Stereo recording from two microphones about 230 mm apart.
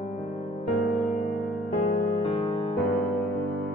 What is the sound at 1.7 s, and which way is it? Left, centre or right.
Music, left.